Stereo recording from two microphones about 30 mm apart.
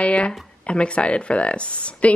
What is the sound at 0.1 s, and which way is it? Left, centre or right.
A woman's voice, left.